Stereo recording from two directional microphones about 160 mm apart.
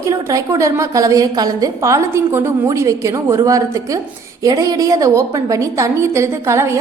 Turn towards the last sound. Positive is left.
turn(degrees=-15)  # may be behind; listen again after turning